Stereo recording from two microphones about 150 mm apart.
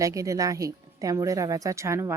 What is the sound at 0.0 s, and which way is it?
A woman's voice, 20° right (ahead or behind).